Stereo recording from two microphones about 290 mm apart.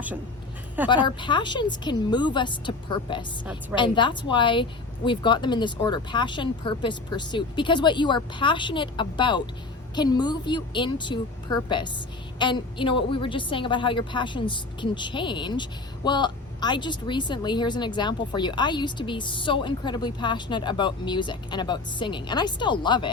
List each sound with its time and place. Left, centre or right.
1.0 s a woman's voice: centre